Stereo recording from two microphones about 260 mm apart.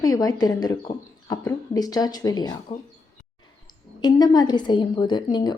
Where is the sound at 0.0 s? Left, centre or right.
Centre.